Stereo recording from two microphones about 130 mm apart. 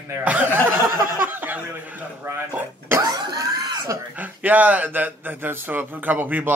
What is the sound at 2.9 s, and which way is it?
Speech, 30° right (ahead or behind).